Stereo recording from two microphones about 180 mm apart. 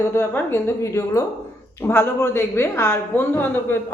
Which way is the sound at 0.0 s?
15° left (ahead or behind).